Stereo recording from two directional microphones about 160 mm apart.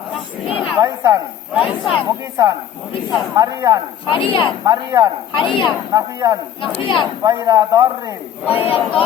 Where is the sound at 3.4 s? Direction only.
20° right (ahead or behind).